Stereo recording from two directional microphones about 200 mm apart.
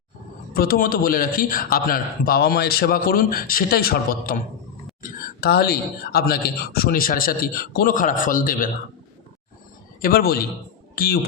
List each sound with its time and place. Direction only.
0.5 s a man's voice: 50° left (ahead or behind)
10.0 s a man's voice: 50° left (ahead or behind)